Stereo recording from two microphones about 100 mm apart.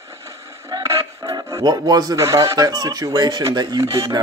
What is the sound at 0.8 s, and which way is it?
Speech, 35° right (ahead or behind).